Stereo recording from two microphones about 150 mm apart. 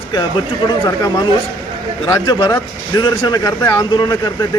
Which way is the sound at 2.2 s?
25° left (ahead or behind).